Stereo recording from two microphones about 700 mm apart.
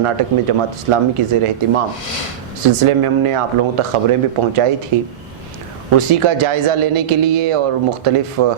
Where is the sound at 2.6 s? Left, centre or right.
Right.